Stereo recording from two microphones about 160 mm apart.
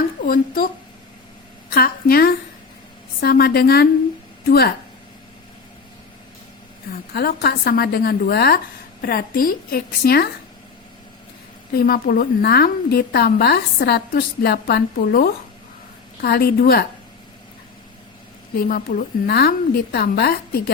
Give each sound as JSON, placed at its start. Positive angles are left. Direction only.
{"t": 0.3, "sound": "a woman's voice", "side_deg": 65}
{"t": 1.7, "sound": "a woman's voice", "side_deg": 70}
{"t": 7.1, "sound": "a woman's voice", "side_deg": 80}
{"t": 11.7, "sound": "a woman's voice", "side_deg": 70}
{"t": 18.5, "sound": "a woman's voice", "side_deg": 65}